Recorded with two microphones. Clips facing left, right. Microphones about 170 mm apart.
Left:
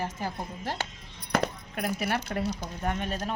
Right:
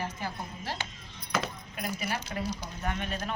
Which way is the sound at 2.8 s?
40° left (ahead or behind).